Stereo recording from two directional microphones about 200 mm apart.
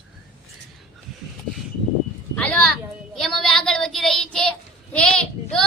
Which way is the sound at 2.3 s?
5° left (ahead or behind).